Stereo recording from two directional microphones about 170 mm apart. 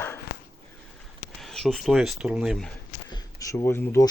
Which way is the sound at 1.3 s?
Centre (ahead or behind).